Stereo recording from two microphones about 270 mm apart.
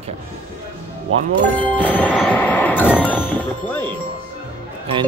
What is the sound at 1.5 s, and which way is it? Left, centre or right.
Music, centre.